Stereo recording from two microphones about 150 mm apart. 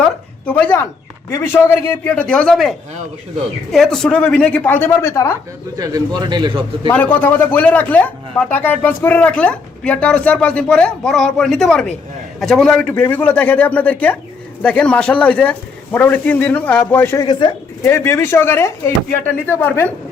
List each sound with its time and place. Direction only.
0.0 s a sound: 10° left (ahead or behind)
1.3 s speech: 15° left (ahead or behind)
5.7 s a man's voice: 25° right (ahead or behind)
6.9 s a man's voice: 10° left (ahead or behind)